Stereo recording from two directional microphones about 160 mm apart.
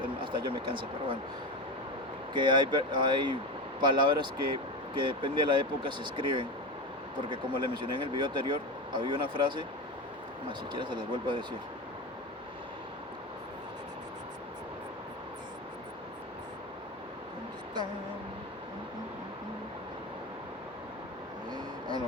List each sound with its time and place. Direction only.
0.2 s speech: 30° right (ahead or behind)
2.3 s speech: 30° right (ahead or behind)
10.7 s speech: 30° right (ahead or behind)
21.5 s vehicle: 25° right (ahead or behind)